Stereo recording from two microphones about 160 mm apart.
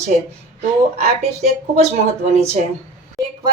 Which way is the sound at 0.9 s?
45° right (ahead or behind).